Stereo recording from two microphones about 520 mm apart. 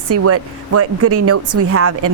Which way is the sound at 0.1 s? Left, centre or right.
Right.